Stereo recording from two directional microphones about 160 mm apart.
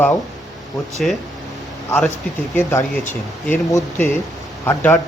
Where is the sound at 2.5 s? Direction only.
15° left (ahead or behind).